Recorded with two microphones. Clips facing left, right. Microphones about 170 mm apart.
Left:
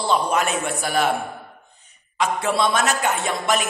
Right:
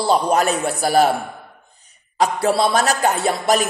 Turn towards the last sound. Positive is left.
turn(degrees=-35)  # may be behind; listen again after turning